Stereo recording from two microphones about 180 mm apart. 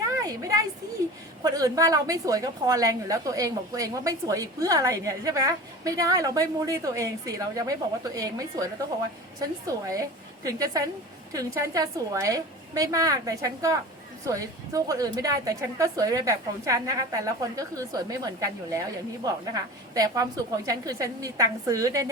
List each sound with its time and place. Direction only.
0.2 s a woman's voice: 20° right (ahead or behind)